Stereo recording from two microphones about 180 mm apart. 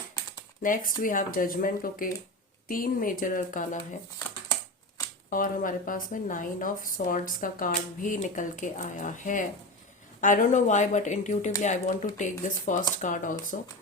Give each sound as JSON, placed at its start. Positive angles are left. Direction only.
{"t": 0.6, "sound": "speech", "side_deg": 50}
{"t": 5.3, "sound": "speech", "side_deg": 50}